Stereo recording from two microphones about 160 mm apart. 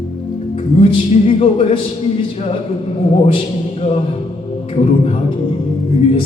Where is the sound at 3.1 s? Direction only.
35° left (ahead or behind).